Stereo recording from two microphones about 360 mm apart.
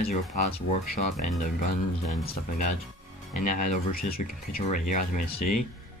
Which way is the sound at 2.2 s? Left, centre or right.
Centre.